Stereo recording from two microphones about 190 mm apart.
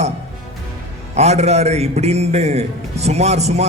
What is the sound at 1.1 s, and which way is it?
A man's voice, 35° right (ahead or behind).